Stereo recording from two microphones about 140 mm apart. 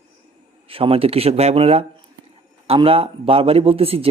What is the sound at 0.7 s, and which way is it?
A man's voice, 40° right (ahead or behind).